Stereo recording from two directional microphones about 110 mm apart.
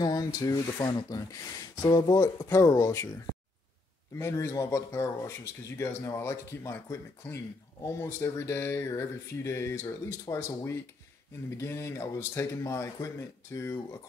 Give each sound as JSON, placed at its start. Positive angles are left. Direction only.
{"t": 0.0, "sound": "speech", "side_deg": 35}
{"t": 2.5, "sound": "speech", "side_deg": 30}
{"t": 4.2, "sound": "speech", "side_deg": 25}